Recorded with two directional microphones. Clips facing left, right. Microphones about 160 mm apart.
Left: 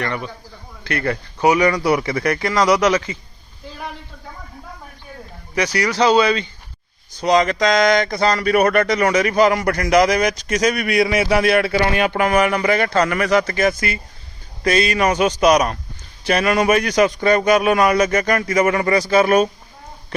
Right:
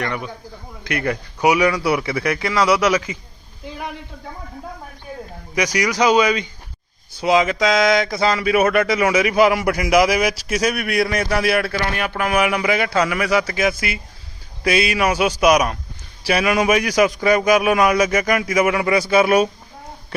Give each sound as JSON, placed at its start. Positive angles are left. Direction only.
{"t": 0.0, "sound": "a man's voice", "side_deg": -5}
{"t": 5.5, "sound": "a man's voice", "side_deg": -15}
{"t": 11.8, "sound": "speech", "side_deg": 20}
{"t": 12.3, "sound": "a man's voice", "side_deg": -5}